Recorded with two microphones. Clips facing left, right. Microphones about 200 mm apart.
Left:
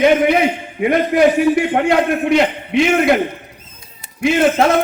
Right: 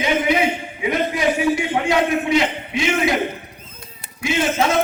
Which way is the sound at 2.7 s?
60° left (ahead or behind).